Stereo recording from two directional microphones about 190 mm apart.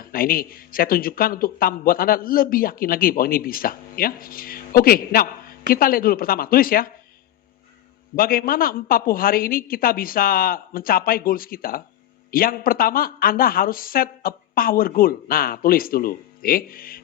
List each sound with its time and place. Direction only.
0.0 s speech: 50° left (ahead or behind)
8.1 s speech: 50° left (ahead or behind)